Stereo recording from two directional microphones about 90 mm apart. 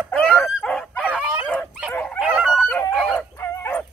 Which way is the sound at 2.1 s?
5° right (ahead or behind).